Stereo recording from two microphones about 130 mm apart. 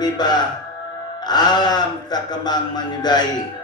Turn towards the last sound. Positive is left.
turn(degrees=35)  # may be behind; listen again after turning